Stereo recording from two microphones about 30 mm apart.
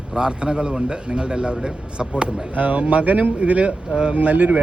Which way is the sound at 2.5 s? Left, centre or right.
Right.